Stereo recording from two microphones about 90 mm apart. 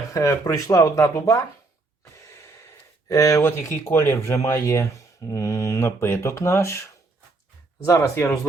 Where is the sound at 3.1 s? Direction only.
35° left (ahead or behind).